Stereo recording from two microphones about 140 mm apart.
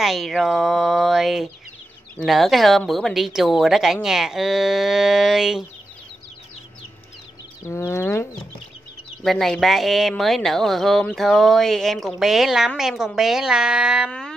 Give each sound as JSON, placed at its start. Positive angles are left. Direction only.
{"t": 0.0, "sound": "speech", "side_deg": 0}
{"t": 7.6, "sound": "speech", "side_deg": 20}
{"t": 9.2, "sound": "speech", "side_deg": 0}